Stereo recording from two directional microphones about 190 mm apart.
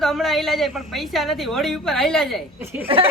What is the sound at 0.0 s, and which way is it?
Speech, centre (ahead or behind).